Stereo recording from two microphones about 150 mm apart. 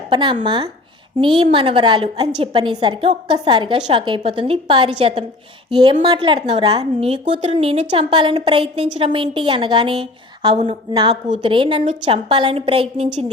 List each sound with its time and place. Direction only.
0.1 s a woman's voice: 30° right (ahead or behind)